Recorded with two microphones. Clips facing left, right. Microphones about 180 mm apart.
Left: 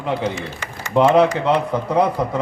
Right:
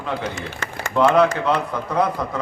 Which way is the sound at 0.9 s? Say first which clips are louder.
Left 2 dB; 25° left (ahead or behind).